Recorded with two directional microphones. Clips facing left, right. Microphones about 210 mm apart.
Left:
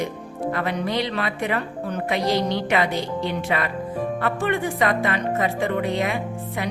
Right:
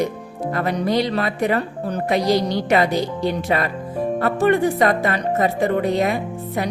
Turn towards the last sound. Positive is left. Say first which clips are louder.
# right 3 dB
turn(degrees=-40)  # may be behind; listen again after turning